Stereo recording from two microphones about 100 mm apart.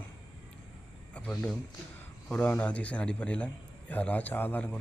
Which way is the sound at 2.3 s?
15° left (ahead or behind).